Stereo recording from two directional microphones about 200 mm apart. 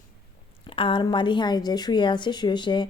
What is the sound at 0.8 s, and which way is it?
A woman's voice, 25° left (ahead or behind).